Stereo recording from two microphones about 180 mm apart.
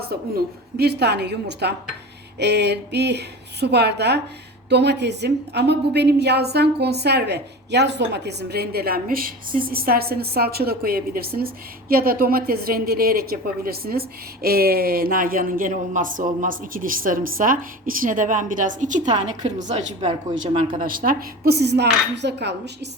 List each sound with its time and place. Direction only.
0.3 s a woman's voice: 65° right (ahead or behind)